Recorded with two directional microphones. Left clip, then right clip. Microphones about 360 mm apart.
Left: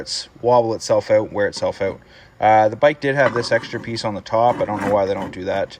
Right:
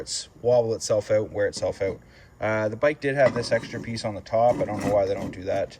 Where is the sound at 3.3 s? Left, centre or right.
Centre.